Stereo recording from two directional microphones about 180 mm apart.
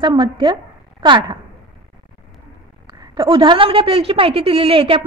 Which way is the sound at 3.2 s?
25° right (ahead or behind).